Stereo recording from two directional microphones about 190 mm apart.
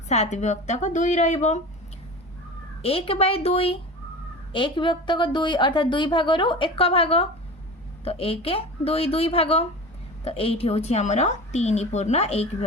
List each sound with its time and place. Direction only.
0.1 s a woman's voice: 35° left (ahead or behind)
2.8 s a woman's voice: 30° left (ahead or behind)